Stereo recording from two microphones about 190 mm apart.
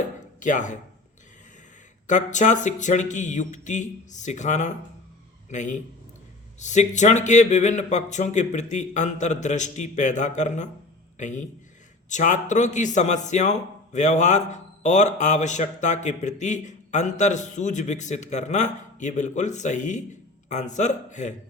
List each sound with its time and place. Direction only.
0.3 s speech: 40° left (ahead or behind)
2.0 s a man's voice: 40° left (ahead or behind)